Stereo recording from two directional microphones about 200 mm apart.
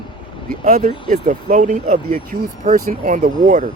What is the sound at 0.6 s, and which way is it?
Speech, 35° right (ahead or behind).